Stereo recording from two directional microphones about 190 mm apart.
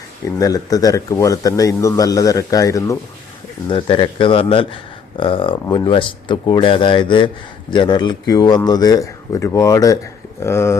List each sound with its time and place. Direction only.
0.3 s a man's voice: 20° left (ahead or behind)
3.7 s a man's voice: 25° left (ahead or behind)